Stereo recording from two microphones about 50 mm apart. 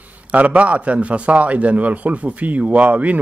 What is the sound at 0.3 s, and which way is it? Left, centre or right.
A man's voice, right.